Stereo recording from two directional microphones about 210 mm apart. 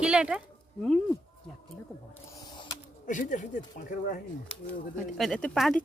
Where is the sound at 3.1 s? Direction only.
35° left (ahead or behind).